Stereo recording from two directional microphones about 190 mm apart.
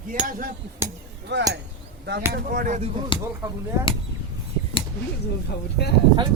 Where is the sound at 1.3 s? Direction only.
65° right (ahead or behind).